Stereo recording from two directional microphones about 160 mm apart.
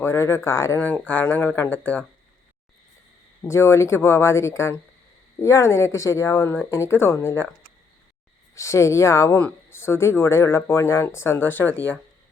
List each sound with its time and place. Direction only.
0.0 s speech: 15° left (ahead or behind)
3.4 s speech: 15° left (ahead or behind)
8.5 s speech: 20° left (ahead or behind)